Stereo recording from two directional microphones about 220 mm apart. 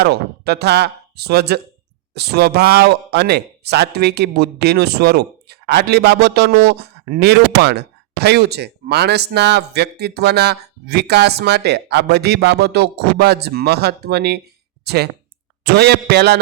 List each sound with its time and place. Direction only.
0.0 s speech: 45° right (ahead or behind)